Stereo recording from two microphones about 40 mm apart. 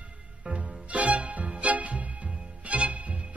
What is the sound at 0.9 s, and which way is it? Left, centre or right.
Music, right.